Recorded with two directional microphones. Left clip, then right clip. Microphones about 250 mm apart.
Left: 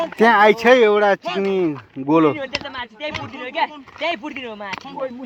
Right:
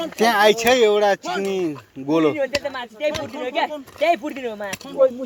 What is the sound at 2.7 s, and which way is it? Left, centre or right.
Speech, left.